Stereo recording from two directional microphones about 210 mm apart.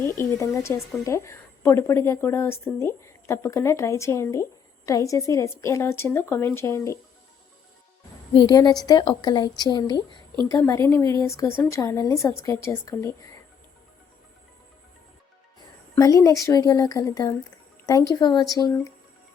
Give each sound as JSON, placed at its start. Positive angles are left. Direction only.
{"t": 0.0, "sound": "speech", "side_deg": 10}
{"t": 8.3, "sound": "a woman's voice", "side_deg": 20}
{"t": 16.0, "sound": "speech", "side_deg": 15}